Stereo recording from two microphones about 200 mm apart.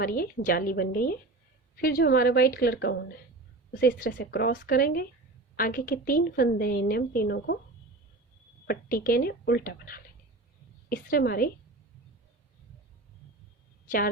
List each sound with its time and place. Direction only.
0.0 s a woman's voice: 45° left (ahead or behind)
8.6 s a woman's voice: 50° left (ahead or behind)
11.1 s a woman's voice: 50° left (ahead or behind)